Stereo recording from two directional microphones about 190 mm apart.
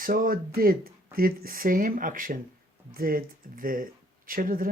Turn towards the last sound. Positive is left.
turn(degrees=-45)  # may be behind; listen again after turning